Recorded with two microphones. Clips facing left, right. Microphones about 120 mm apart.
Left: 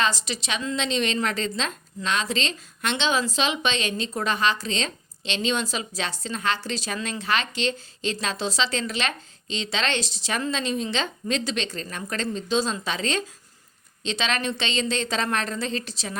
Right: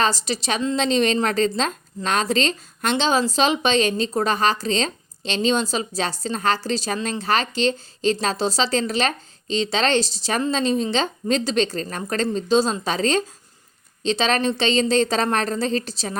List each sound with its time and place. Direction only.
0.0 s a woman's voice: 35° right (ahead or behind)